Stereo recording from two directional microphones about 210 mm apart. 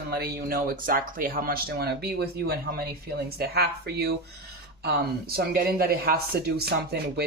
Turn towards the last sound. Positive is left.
turn(degrees=-50)  # may be behind; listen again after turning